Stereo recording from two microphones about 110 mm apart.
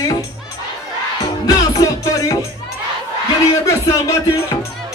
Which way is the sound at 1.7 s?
35° left (ahead or behind).